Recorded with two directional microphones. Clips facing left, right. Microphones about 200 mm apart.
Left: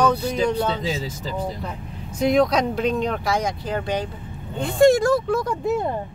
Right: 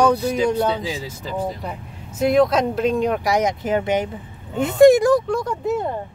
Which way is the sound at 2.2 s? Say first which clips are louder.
Right 2 dB; 5° right (ahead or behind).